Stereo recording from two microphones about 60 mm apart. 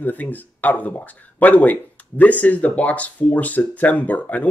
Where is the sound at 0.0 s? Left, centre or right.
Left.